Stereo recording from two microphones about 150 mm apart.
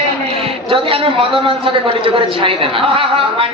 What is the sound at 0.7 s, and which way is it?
A man's voice, 35° right (ahead or behind).